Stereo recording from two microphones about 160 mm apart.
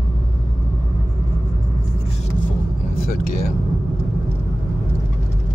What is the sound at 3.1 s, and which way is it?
Vehicle, 60° left (ahead or behind).